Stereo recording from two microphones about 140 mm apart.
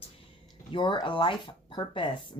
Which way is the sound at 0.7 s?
35° left (ahead or behind).